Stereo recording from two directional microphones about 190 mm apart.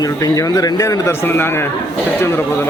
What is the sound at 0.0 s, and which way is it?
A man's voice, 20° left (ahead or behind).